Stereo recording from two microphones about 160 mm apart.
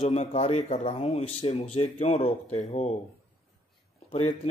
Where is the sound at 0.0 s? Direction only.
40° left (ahead or behind).